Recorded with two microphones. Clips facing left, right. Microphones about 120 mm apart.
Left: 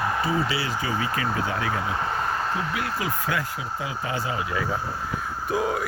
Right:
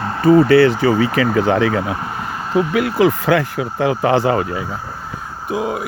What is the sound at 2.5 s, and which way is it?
Speech, 75° right (ahead or behind).